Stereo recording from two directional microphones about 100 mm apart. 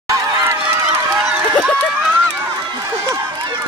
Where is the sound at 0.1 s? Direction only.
25° right (ahead or behind).